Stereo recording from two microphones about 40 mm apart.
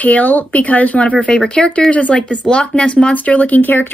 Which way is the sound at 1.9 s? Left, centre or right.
Left.